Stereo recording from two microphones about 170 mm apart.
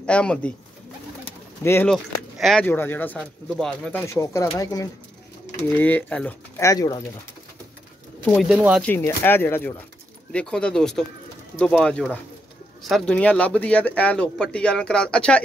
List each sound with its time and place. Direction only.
0.0 s speech: 5° left (ahead or behind)
1.6 s speech: 15° left (ahead or behind)
1.9 s speech: centre (ahead or behind)
4.0 s speech: 15° left (ahead or behind)
5.8 s speech: 10° left (ahead or behind)
8.3 s speech: centre (ahead or behind)
8.8 s speech: 10° left (ahead or behind)